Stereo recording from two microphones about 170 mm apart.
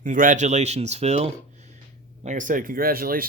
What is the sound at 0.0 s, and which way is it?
Speech, 50° right (ahead or behind).